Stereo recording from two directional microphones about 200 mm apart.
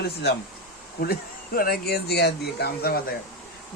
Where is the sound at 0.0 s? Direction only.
55° left (ahead or behind).